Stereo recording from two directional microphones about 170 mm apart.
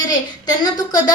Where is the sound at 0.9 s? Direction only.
20° left (ahead or behind).